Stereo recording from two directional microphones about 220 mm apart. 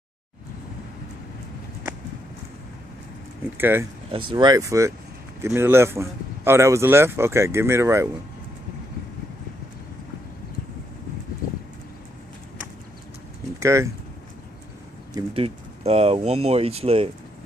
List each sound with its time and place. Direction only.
3.5 s speech: 10° right (ahead or behind)
13.6 s speech: 15° right (ahead or behind)
15.1 s speech: 25° right (ahead or behind)